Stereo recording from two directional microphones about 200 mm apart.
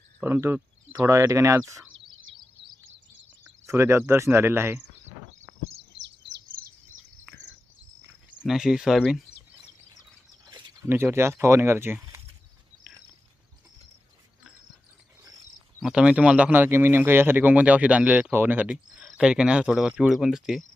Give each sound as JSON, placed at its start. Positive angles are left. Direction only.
{"t": 0.2, "sound": "speech", "side_deg": -10}
{"t": 3.7, "sound": "speech", "side_deg": -15}
{"t": 5.9, "sound": "chirp", "side_deg": -60}
{"t": 8.4, "sound": "speech", "side_deg": 0}
{"t": 10.4, "sound": "speech", "side_deg": -15}
{"t": 15.8, "sound": "speech", "side_deg": -5}